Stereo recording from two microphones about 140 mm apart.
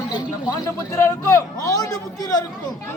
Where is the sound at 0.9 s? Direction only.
20° left (ahead or behind).